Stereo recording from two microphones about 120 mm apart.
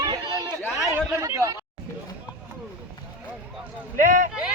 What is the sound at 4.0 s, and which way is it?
Speech, 90° right.